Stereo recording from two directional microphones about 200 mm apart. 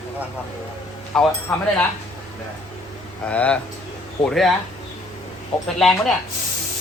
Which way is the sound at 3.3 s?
5° left (ahead or behind).